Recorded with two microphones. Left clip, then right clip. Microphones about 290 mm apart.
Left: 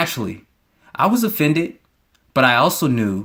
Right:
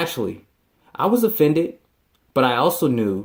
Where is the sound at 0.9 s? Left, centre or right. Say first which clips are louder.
Even; left.